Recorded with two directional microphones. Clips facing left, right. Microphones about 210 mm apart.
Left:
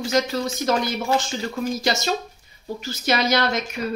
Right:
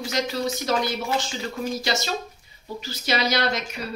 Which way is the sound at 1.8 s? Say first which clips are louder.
Left 3 dB; 45° left (ahead or behind).